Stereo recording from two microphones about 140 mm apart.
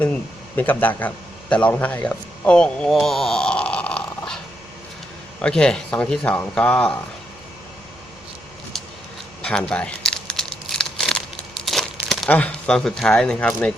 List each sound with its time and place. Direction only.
0.0 s speech: 10° left (ahead or behind)
5.4 s speech: 5° left (ahead or behind)
8.7 s a sound: centre (ahead or behind)
9.4 s crumpling: 5° left (ahead or behind)
11.6 s speech: centre (ahead or behind)